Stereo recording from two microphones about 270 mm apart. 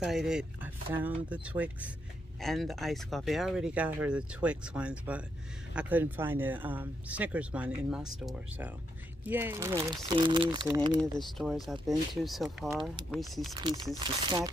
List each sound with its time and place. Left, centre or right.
0.0 s speech: centre
11.3 s speech: centre
13.9 s speech: centre